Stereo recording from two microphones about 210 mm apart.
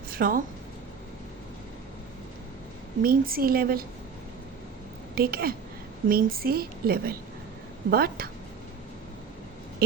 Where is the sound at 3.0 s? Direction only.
45° right (ahead or behind).